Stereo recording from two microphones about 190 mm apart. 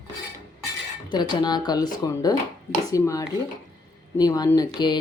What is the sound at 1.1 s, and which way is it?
Speech, 25° left (ahead or behind).